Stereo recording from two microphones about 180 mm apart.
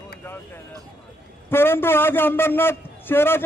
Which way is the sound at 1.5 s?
10° left (ahead or behind).